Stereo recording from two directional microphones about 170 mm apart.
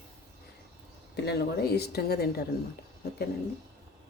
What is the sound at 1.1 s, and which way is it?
A woman's voice, 75° left (ahead or behind).